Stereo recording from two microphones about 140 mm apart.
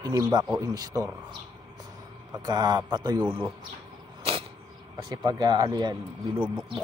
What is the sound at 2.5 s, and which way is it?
Speech, 30° right (ahead or behind).